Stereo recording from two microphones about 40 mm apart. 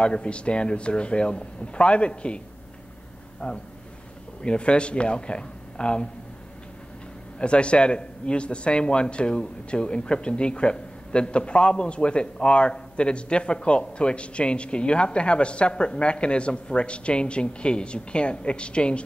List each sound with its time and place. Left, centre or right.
0.0 s speech: left
7.3 s speech: left